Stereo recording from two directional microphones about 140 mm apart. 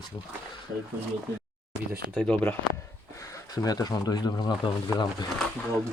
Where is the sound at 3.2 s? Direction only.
25° left (ahead or behind).